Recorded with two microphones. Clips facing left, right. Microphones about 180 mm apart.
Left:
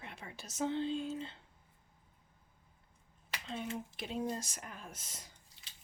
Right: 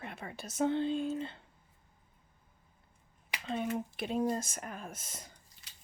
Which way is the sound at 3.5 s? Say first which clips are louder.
Right 7 dB; 55° right (ahead or behind).